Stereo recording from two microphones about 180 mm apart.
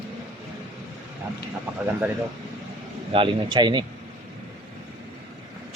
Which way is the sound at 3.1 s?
25° right (ahead or behind).